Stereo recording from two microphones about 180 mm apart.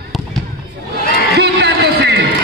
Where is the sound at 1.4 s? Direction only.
70° right (ahead or behind).